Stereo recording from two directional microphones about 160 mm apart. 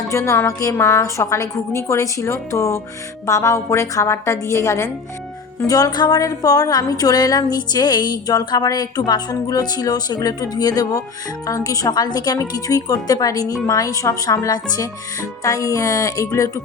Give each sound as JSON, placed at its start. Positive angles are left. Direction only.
{"t": 0.1, "sound": "a woman's voice", "side_deg": 15}